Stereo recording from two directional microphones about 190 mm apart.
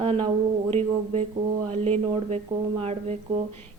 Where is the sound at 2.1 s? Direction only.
30° right (ahead or behind).